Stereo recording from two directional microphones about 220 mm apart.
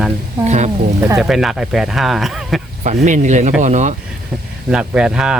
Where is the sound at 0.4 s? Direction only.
30° right (ahead or behind).